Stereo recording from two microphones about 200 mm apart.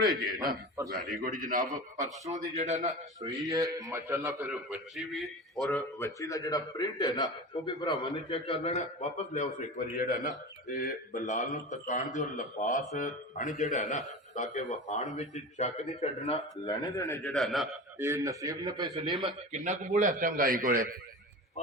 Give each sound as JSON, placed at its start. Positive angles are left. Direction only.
{"t": 1.2, "sound": "a man's voice", "side_deg": -45}
{"t": 3.2, "sound": "a man's voice", "side_deg": -15}
{"t": 16.6, "sound": "speech", "side_deg": 15}
{"t": 17.3, "sound": "speech", "side_deg": 0}
{"t": 17.9, "sound": "a man's voice", "side_deg": -15}
{"t": 19.5, "sound": "a man's voice", "side_deg": -35}